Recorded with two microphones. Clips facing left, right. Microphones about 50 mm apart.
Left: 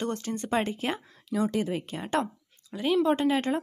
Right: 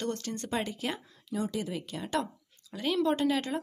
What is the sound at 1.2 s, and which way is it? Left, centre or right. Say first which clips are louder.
Speech: left 6 dB; left.